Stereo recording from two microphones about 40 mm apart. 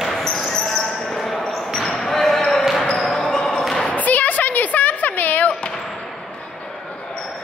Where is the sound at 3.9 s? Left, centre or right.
Left.